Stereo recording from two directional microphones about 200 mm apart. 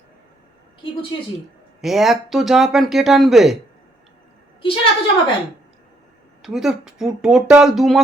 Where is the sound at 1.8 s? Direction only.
Centre (ahead or behind).